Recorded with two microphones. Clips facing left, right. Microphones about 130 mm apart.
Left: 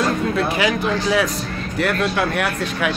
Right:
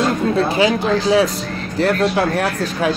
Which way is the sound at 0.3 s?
30° right (ahead or behind).